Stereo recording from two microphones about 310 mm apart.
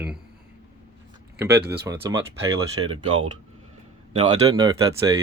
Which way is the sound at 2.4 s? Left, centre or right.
Centre.